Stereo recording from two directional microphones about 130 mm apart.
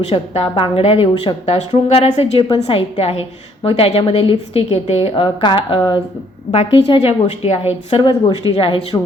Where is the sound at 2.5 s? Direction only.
45° left (ahead or behind).